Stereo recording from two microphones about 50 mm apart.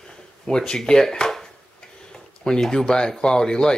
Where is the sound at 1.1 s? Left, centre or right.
Centre.